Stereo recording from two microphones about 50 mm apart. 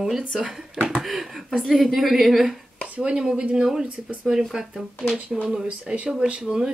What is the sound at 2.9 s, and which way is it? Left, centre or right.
Speech, right.